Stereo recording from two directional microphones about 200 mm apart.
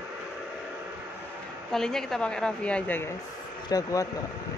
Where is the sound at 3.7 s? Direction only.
15° left (ahead or behind).